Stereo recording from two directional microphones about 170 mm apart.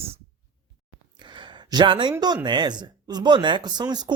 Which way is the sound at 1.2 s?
25° right (ahead or behind).